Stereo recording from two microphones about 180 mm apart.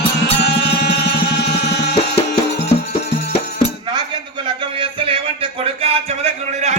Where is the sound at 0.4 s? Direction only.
70° left (ahead or behind).